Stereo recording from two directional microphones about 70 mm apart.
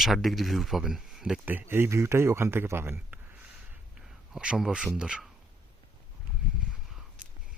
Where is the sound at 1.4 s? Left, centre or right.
Right.